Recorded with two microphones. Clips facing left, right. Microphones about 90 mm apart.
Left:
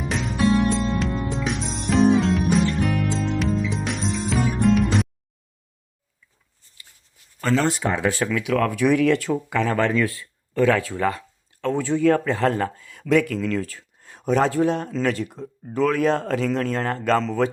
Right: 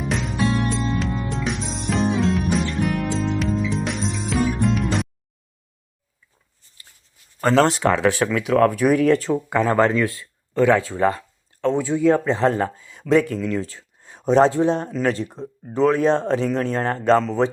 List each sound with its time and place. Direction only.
0.0 s music: centre (ahead or behind)
7.5 s speech: 80° right
8.3 s speech: 40° right (ahead or behind)